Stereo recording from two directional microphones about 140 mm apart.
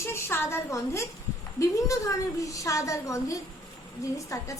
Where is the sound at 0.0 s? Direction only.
20° left (ahead or behind).